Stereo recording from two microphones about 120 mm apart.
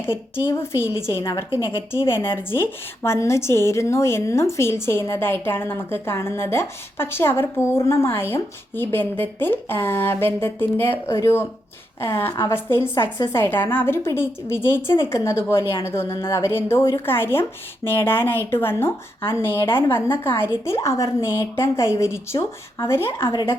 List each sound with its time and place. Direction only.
0.5 s a woman's voice: 20° left (ahead or behind)
12.9 s speech: 35° left (ahead or behind)
13.3 s a woman's voice: 20° left (ahead or behind)